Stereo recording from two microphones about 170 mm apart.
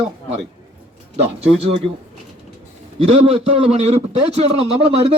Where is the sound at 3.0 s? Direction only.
35° right (ahead or behind).